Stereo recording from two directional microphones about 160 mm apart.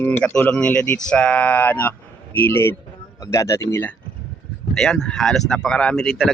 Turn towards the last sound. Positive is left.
turn(degrees=5)  # may be behind; listen again after turning